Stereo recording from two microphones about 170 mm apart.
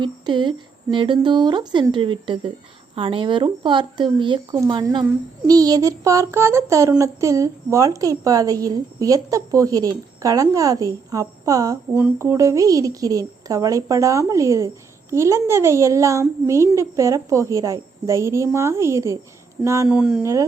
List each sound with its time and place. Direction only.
0.0 s a woman's voice: 25° right (ahead or behind)
19.9 s speech: 5° right (ahead or behind)